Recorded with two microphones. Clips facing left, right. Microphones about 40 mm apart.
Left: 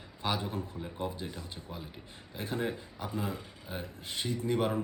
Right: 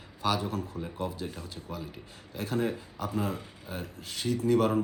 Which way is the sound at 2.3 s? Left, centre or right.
Left.